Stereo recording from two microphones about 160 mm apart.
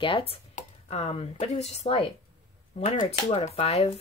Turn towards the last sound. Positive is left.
turn(degrees=40)  # may be behind; listen again after turning